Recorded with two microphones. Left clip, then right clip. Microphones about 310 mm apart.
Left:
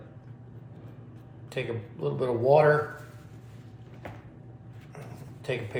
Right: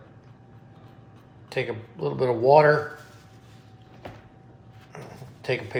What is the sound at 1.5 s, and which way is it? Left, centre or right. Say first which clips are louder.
Speech: right 4 dB; right.